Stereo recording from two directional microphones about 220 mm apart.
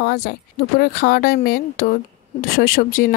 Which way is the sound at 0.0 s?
45° left (ahead or behind).